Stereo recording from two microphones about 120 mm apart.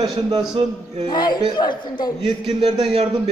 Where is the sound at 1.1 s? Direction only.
35° left (ahead or behind).